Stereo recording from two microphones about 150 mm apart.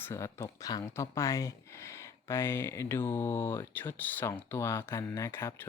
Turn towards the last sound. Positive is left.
turn(degrees=15)  # may be behind; listen again after turning